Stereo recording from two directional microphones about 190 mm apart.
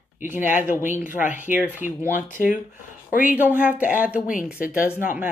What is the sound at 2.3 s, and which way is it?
Speech, 45° left (ahead or behind).